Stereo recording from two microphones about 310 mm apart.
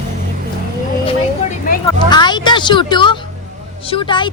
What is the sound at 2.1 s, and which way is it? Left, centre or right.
A woman's voice, centre.